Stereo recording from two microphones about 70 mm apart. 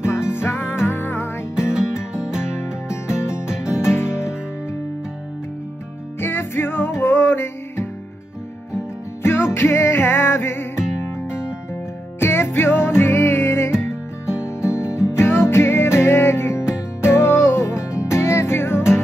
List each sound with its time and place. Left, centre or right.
0.0 s music: left
1.5 s music: centre
3.2 s music: left
3.4 s music: centre
6.1 s music: left
9.2 s music: left
10.8 s music: centre
12.2 s music: left
14.9 s music: centre
15.1 s music: left